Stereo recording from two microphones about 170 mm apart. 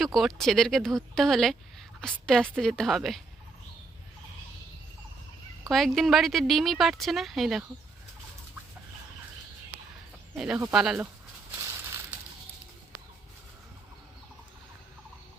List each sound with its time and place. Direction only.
0.0 s a woman's voice: centre (ahead or behind)
5.6 s a woman's voice: centre (ahead or behind)
10.3 s a woman's voice: 5° right (ahead or behind)
11.6 s crushing: 20° right (ahead or behind)